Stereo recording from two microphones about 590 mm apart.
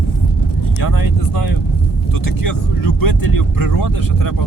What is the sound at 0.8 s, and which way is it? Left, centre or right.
Speech, left.